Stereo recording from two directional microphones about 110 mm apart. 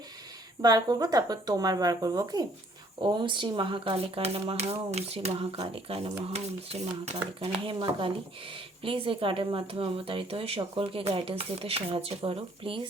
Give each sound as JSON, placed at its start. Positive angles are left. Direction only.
{"t": 0.6, "sound": "speech", "side_deg": -35}
{"t": 7.4, "sound": "speech", "side_deg": -50}